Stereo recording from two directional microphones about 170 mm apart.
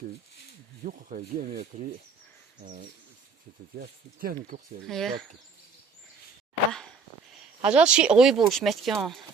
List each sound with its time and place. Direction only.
0.9 s speech: 50° right (ahead or behind)
3.8 s speech: 60° right (ahead or behind)
4.9 s speech: centre (ahead or behind)
6.7 s a sound: 5° left (ahead or behind)
7.6 s speech: 5° right (ahead or behind)